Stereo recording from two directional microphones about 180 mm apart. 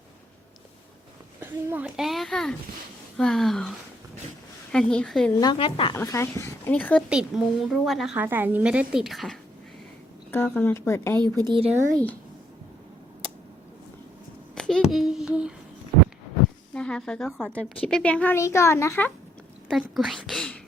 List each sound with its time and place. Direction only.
1.4 s a woman's voice: 10° right (ahead or behind)
5.4 s speech: 25° left (ahead or behind)
6.0 s a woman's voice: 15° left (ahead or behind)
7.1 s a woman's voice: 5° right (ahead or behind)
10.3 s a woman's voice: 10° left (ahead or behind)
11.2 s speech: 25° right (ahead or behind)
14.5 s a sound: 5° left (ahead or behind)
16.7 s a woman's voice: 5° left (ahead or behind)
19.7 s a woman's voice: centre (ahead or behind)